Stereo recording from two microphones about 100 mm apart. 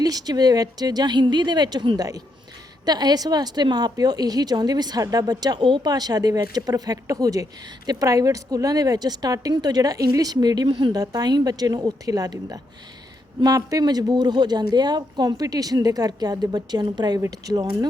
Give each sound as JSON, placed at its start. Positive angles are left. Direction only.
{"t": 0.0, "sound": "a woman's voice", "side_deg": -40}
{"t": 10.9, "sound": "a woman's voice", "side_deg": -40}
{"t": 17.2, "sound": "a woman's voice", "side_deg": -30}